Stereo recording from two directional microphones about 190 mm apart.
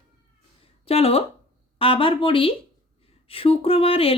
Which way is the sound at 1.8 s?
30° left (ahead or behind).